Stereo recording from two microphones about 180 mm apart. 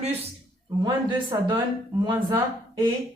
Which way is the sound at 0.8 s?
25° right (ahead or behind).